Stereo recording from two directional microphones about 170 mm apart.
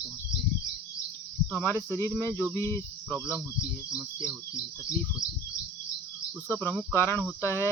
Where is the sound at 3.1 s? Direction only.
10° right (ahead or behind).